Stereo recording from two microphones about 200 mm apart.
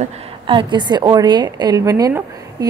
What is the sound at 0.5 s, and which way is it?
A woman's voice, 25° right (ahead or behind).